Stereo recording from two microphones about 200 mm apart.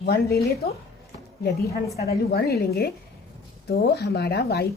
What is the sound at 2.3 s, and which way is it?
A woman's voice, 55° left (ahead or behind).